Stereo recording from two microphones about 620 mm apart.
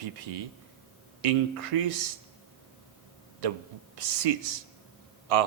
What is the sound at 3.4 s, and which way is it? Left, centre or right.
A man's voice, right.